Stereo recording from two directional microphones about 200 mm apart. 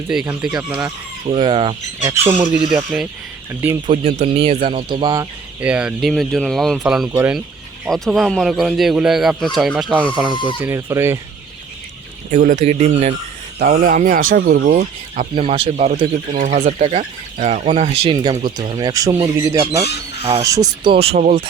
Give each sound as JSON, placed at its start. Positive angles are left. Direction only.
{"t": 0.1, "sound": "speech", "side_deg": -5}
{"t": 0.9, "sound": "speech", "side_deg": -25}
{"t": 2.7, "sound": "speech", "side_deg": -5}
{"t": 3.8, "sound": "speech", "side_deg": -30}
{"t": 5.5, "sound": "speech", "side_deg": -5}
{"t": 7.9, "sound": "speech", "side_deg": 0}
{"t": 10.6, "sound": "speech", "side_deg": -15}
{"t": 12.3, "sound": "speech", "side_deg": -40}
{"t": 15.4, "sound": "speech", "side_deg": -30}